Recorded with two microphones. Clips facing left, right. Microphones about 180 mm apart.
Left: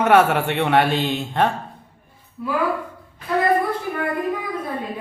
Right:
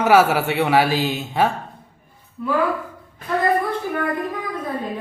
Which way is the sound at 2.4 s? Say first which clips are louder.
Right 2 dB; 5° left (ahead or behind).